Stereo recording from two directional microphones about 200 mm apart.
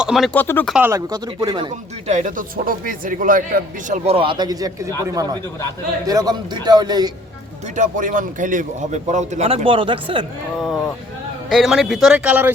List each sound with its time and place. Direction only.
0.0 s speech: centre (ahead or behind)
0.3 s speech: 10° left (ahead or behind)
0.7 s speech: 10° right (ahead or behind)
2.0 s a man's voice: 35° right (ahead or behind); by 7.1 s 20° right (ahead or behind)
7.8 s speech: 40° right (ahead or behind); by 10.2 s 25° right (ahead or behind)
11.4 s speech: centre (ahead or behind)